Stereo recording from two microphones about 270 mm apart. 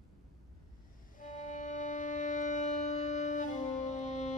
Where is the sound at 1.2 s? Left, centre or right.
Left.